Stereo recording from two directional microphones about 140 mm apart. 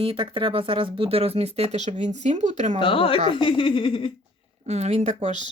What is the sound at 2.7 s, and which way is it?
Speech, 40° left (ahead or behind).